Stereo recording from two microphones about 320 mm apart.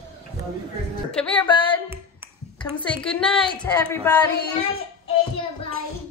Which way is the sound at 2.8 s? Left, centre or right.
Centre.